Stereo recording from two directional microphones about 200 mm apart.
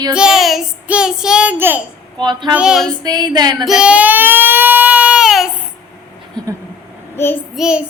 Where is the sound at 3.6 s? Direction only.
5° right (ahead or behind).